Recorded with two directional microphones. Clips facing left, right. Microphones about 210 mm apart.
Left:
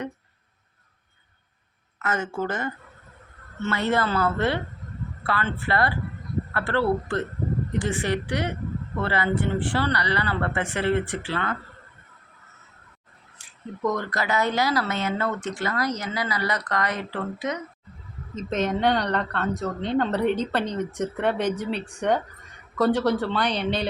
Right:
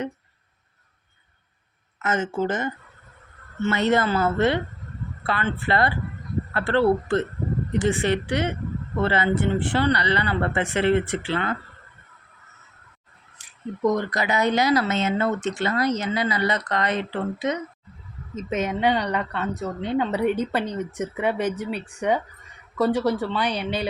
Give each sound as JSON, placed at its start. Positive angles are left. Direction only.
{"t": 2.0, "sound": "speech", "side_deg": -20}
{"t": 13.4, "sound": "crow", "side_deg": -20}
{"t": 13.8, "sound": "speech", "side_deg": -15}
{"t": 18.3, "sound": "speech", "side_deg": -10}